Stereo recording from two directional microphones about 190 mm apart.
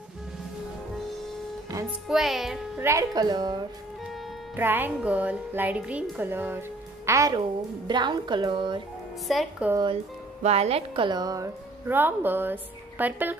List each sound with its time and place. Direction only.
2.0 s music: centre (ahead or behind)
2.8 s a woman's voice: 15° right (ahead or behind)
4.6 s a woman's voice: 10° right (ahead or behind)
9.3 s music: centre (ahead or behind)
10.4 s speech: 35° right (ahead or behind); by 13.4 s 10° right (ahead or behind)